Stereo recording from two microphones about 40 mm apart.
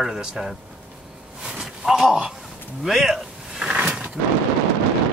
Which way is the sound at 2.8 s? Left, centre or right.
Centre.